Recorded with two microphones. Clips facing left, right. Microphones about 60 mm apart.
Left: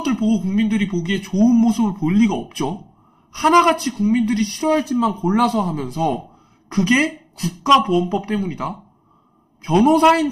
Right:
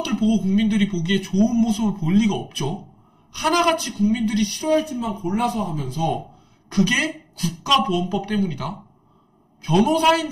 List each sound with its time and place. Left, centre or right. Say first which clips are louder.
0.0 s speech: left 2 dB; left
1.5 s speech: left 5 dB; left
4.8 s speech: left 7 dB; left
5.8 s speech: left 3 dB; left
6.7 s a man's voice: left 3 dB; left
9.8 s speech: left 8 dB; left